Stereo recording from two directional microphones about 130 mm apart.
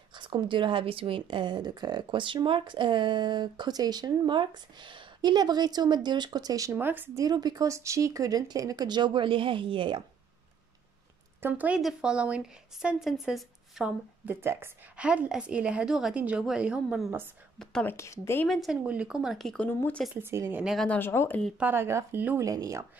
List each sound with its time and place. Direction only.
0.1 s a woman's voice: 40° right (ahead or behind); by 7.2 s 15° right (ahead or behind)
7.2 s a woman's voice: 30° right (ahead or behind)
11.4 s a woman's voice: 10° right (ahead or behind)
14.2 s a woman's voice: 20° right (ahead or behind)
17.8 s a woman's voice: 20° left (ahead or behind)
18.5 s speech: centre (ahead or behind); by 20.0 s 15° left (ahead or behind)
20.2 s speech: 20° right (ahead or behind)
20.6 s speech: 5° left (ahead or behind)
21.0 s speech: 15° left (ahead or behind)
21.5 s a woman's voice: 15° right (ahead or behind)